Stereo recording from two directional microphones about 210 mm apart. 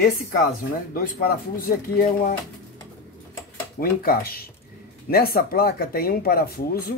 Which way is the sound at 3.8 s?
45° left (ahead or behind).